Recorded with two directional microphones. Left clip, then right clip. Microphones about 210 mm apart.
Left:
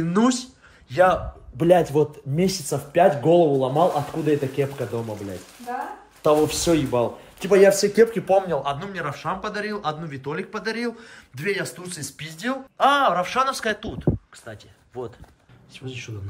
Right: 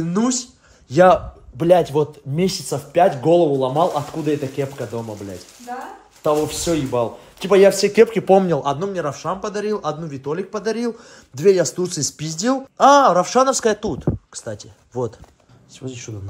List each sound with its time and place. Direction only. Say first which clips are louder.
0.0 s speech: even; centre (ahead or behind)
0.9 s speech: right 6 dB; 20° right (ahead or behind)
6.2 s speech: even; centre (ahead or behind)
7.4 s speech: right 3 dB; 15° right (ahead or behind)
7.7 s speech: right 3 dB; centre (ahead or behind)
8.1 s speech: right 5 dB; 40° right (ahead or behind)
8.7 s speech: right 6 dB; 15° right (ahead or behind)
11.8 s speech: right 11 dB; 30° right (ahead or behind)
15.8 s speech: right 3 dB; 15° right (ahead or behind)